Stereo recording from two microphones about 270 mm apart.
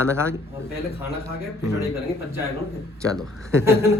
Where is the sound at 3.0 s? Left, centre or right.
Centre.